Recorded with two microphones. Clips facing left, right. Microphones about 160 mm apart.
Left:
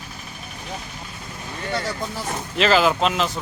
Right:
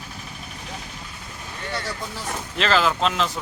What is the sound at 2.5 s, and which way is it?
Speech, 10° left (ahead or behind).